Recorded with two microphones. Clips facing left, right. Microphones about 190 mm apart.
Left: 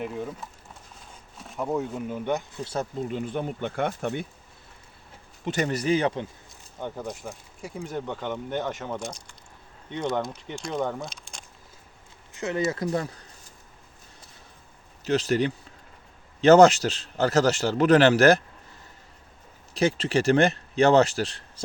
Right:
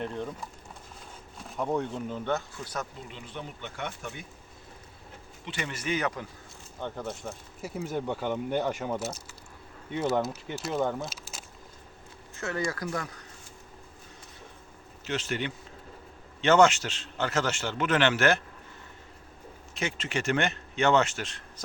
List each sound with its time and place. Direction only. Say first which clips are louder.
0.0 s speech: left 2 dB; 5° left (ahead or behind)
2.6 s speech: left 6 dB; 30° left (ahead or behind)
3.1 s speech: left 11 dB; 50° left (ahead or behind)
5.5 s a man's voice: left 8 dB; 40° left (ahead or behind)
6.7 s speech: left 2 dB; 10° left (ahead or behind)
7.9 s speech: right 1 dB; 10° right (ahead or behind)
12.3 s speech: left 5 dB; 15° left (ahead or behind)
15.0 s a man's voice: left 8 dB; 35° left (ahead or behind)
19.7 s a man's voice: left 9 dB; 35° left (ahead or behind)